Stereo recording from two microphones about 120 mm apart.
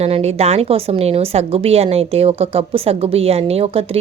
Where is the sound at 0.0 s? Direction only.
60° right (ahead or behind).